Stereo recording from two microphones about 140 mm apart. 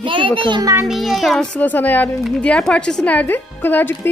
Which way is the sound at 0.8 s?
Centre (ahead or behind).